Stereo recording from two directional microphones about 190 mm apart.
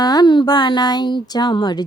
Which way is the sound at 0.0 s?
20° left (ahead or behind).